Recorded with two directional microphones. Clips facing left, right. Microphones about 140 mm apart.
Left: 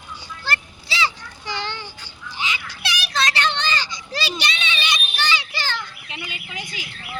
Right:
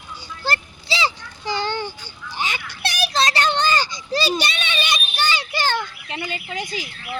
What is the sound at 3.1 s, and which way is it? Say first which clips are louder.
Children playing: right 2 dB; 40° right (ahead or behind).